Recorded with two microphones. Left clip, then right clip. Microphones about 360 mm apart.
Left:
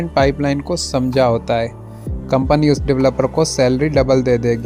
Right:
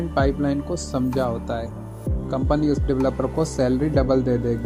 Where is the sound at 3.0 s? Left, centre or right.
Left.